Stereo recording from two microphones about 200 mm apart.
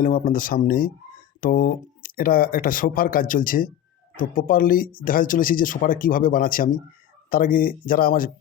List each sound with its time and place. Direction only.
0.0 s speech: 45° left (ahead or behind)